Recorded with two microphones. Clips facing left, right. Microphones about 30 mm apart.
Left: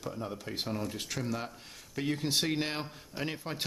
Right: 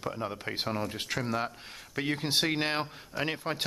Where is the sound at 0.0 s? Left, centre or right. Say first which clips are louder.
Right 4 dB; right.